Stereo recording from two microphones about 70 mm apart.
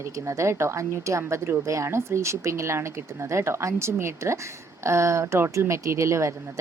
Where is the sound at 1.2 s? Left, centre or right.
Right.